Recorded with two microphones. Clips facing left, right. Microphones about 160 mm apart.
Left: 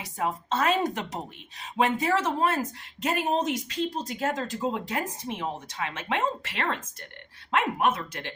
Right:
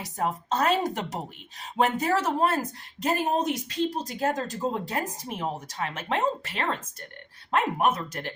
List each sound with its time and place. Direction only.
0.0 s speech: 40° right (ahead or behind)